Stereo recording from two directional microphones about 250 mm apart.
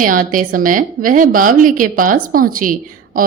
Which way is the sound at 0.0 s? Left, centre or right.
Right.